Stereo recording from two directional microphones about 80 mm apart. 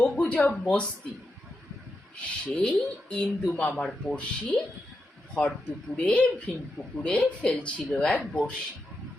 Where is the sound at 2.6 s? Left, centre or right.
Centre.